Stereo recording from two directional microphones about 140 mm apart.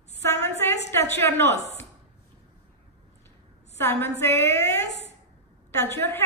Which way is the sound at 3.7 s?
20° left (ahead or behind).